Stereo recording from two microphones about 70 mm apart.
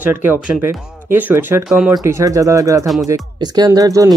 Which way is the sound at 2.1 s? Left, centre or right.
Right.